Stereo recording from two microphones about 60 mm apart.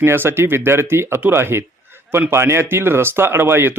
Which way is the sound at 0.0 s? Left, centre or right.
Right.